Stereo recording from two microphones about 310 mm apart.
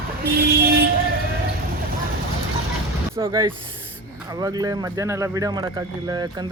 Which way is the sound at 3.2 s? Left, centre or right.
Centre.